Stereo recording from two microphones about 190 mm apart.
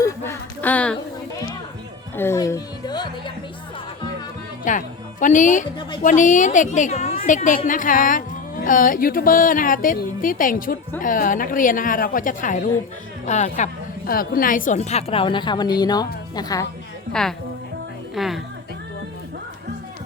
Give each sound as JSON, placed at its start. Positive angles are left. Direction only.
{"t": 0.0, "sound": "a sound", "side_deg": 10}
{"t": 2.1, "sound": "a woman's voice", "side_deg": 15}
{"t": 4.7, "sound": "a woman's voice", "side_deg": 40}
{"t": 14.1, "sound": "a woman's voice", "side_deg": 50}
{"t": 17.1, "sound": "a woman's voice", "side_deg": 5}